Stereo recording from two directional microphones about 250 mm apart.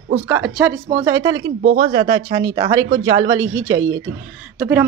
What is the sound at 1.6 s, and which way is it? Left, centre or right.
Speech, right.